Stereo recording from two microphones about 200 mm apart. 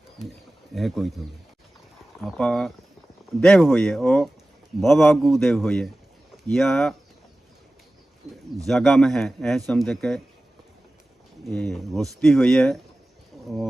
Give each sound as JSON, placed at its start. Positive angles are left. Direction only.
{"t": 0.7, "sound": "speech", "side_deg": 0}
{"t": 2.2, "sound": "speech", "side_deg": 0}
{"t": 8.6, "sound": "speech", "side_deg": 0}
{"t": 11.5, "sound": "speech", "side_deg": 0}